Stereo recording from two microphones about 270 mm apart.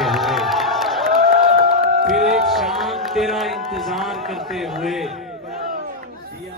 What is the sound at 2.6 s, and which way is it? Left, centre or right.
Speech, centre.